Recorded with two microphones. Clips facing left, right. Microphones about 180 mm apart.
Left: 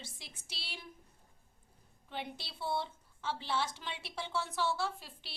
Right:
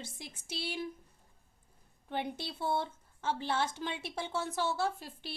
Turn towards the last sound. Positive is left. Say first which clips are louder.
# right 5 dB
turn(degrees=-45)  # may be behind; listen again after turning